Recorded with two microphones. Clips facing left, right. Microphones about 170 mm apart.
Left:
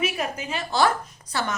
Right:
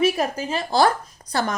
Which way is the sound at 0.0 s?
35° right (ahead or behind).